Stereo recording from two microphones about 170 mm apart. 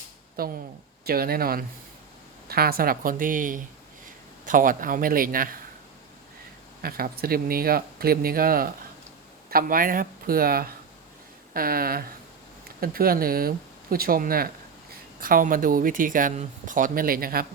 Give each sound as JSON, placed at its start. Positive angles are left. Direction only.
{"t": 0.4, "sound": "speech", "side_deg": -60}
{"t": 6.8, "sound": "speech", "side_deg": -60}